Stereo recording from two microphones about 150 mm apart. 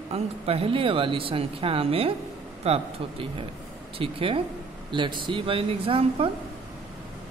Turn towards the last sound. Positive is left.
turn(degrees=-40)  # may be behind; listen again after turning